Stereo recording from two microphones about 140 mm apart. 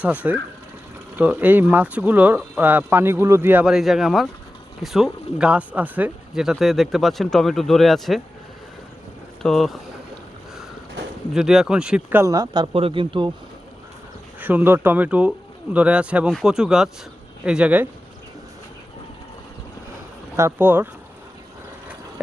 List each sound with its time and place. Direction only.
0.0 s speech: 10° right (ahead or behind)
3.7 s speech: centre (ahead or behind)
9.4 s speech: centre (ahead or behind)
11.3 s speech: 5° right (ahead or behind)
12.2 s speech: 25° right (ahead or behind)
14.4 s speech: 15° right (ahead or behind)
20.3 s speech: 15° right (ahead or behind)